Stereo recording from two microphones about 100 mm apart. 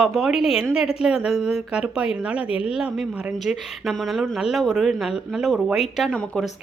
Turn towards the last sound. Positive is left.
turn(degrees=5)  # may be behind; listen again after turning